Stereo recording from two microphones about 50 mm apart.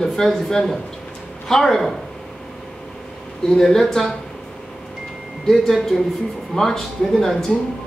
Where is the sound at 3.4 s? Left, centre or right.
Centre.